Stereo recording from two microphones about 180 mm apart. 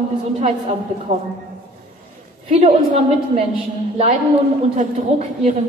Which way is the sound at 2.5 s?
35° right (ahead or behind).